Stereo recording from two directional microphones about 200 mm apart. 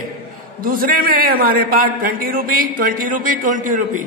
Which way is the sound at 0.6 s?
45° right (ahead or behind).